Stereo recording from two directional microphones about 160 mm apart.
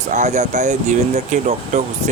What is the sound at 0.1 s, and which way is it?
Speech, 50° right (ahead or behind).